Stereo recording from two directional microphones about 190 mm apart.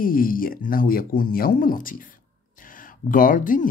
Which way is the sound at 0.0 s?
50° left (ahead or behind).